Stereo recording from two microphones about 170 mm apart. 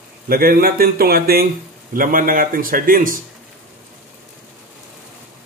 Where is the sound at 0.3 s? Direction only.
60° right (ahead or behind).